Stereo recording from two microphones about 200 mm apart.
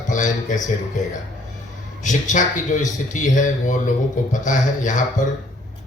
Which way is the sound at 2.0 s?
40° left (ahead or behind).